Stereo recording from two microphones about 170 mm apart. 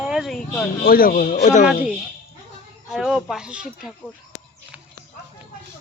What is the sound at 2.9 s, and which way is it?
Speech, centre (ahead or behind).